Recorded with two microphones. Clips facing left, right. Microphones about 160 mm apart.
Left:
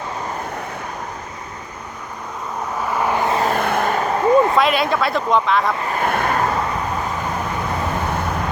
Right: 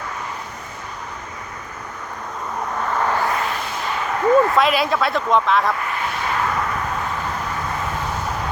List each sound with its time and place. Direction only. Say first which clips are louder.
2.8 s vehicle: left 2 dB; 10° left (ahead or behind)
3.4 s vehicle: left 7 dB; 55° left (ahead or behind)
4.3 s a sound: even; 20° left (ahead or behind)
4.5 s speech: left 1 dB; centre (ahead or behind)
5.9 s vehicle: left 5 dB; 50° left (ahead or behind)